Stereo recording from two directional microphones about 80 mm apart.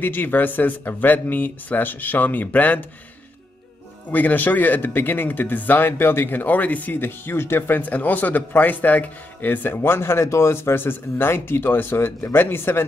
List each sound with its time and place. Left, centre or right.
0.0 s speech: left
4.1 s speech: left